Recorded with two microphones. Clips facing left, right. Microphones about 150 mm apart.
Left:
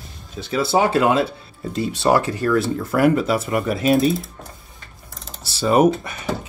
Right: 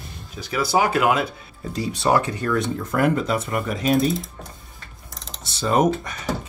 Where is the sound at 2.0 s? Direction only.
Centre (ahead or behind).